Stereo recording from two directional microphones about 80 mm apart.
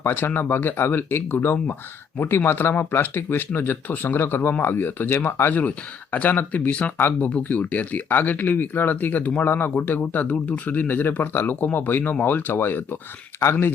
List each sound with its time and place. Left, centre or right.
0.0 s speech: left